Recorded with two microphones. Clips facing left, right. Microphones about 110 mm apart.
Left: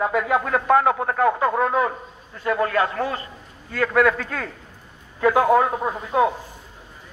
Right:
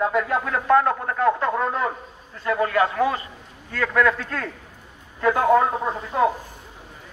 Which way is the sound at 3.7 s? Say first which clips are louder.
Left 2 dB; 5° left (ahead or behind).